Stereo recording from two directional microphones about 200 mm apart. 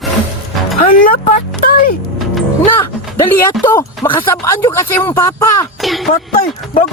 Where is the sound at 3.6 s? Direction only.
10° left (ahead or behind).